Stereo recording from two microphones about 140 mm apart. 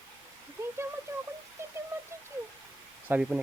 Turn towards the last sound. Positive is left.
turn(degrees=-10)  # may be behind; listen again after turning